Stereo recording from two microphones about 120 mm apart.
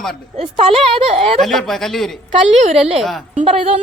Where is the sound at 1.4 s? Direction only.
5° left (ahead or behind).